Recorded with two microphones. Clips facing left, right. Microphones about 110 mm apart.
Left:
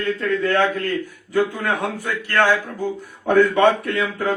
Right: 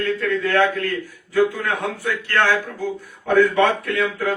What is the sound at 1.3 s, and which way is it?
A man's voice, 15° left (ahead or behind).